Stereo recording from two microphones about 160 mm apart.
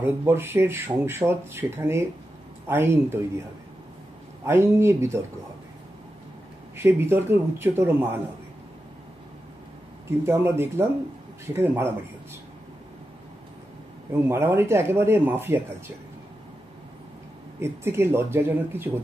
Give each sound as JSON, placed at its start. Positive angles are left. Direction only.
{"t": 0.0, "sound": "speech", "side_deg": -15}
{"t": 4.5, "sound": "speech", "side_deg": -15}
{"t": 6.8, "sound": "speech", "side_deg": -15}
{"t": 10.0, "sound": "speech", "side_deg": -15}
{"t": 14.2, "sound": "speech", "side_deg": -15}
{"t": 17.6, "sound": "speech", "side_deg": -15}